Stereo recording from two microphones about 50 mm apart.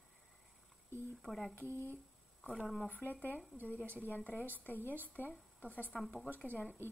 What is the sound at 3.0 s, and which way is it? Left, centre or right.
A woman's voice, left.